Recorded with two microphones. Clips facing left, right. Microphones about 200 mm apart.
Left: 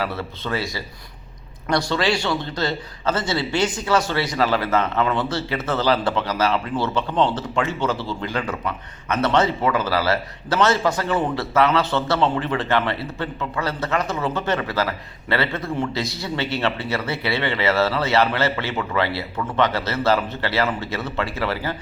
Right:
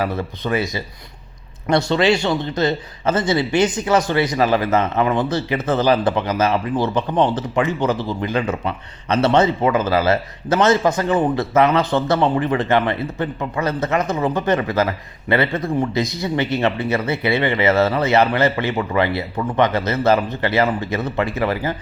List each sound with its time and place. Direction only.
0.0 s a man's voice: 15° right (ahead or behind)